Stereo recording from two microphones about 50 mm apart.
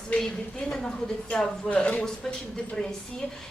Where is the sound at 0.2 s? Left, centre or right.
Centre.